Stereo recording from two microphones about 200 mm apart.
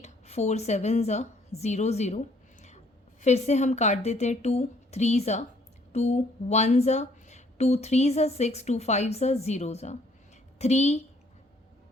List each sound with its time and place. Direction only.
0.0 s speech: 35° left (ahead or behind)